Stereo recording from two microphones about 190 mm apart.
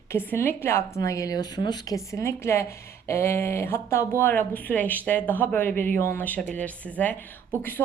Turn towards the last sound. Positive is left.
turn(degrees=10)  # may be behind; listen again after turning